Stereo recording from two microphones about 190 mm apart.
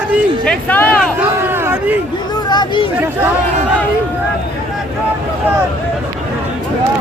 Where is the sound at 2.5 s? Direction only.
25° left (ahead or behind).